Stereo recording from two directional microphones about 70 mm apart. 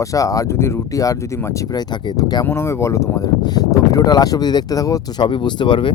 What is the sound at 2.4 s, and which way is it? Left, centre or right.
Speech, left.